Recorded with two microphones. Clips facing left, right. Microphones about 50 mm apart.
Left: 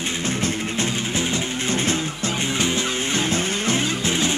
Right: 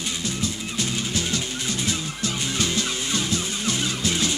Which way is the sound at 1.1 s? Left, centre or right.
Left.